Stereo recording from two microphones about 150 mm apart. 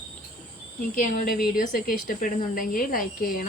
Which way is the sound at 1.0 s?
65° left (ahead or behind).